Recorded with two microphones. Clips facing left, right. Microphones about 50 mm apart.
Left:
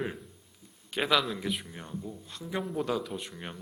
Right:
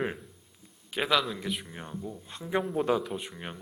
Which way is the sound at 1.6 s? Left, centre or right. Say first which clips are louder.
Right 1 dB; centre.